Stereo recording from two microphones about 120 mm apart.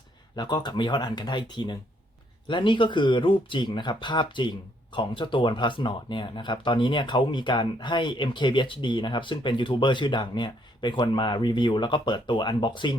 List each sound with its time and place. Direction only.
0.3 s speech: 40° left (ahead or behind)